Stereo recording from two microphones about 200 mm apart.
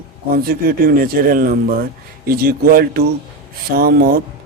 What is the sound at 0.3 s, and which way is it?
Speech, 50° right (ahead or behind).